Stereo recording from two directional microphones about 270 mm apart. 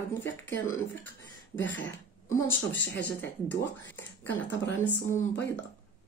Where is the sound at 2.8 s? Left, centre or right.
Left.